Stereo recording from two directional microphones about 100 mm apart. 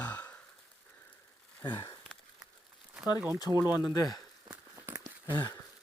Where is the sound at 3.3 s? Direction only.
40° left (ahead or behind).